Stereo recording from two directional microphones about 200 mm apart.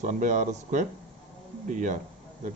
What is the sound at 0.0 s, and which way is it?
Speech, 40° right (ahead or behind).